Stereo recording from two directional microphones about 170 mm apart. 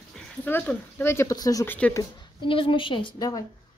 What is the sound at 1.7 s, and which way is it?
Speech, 10° left (ahead or behind).